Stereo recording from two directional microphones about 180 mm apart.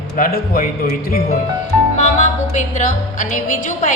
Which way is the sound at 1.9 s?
45° left (ahead or behind).